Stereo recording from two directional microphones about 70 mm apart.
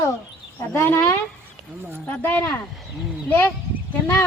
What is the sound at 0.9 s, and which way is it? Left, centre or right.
Speech, left.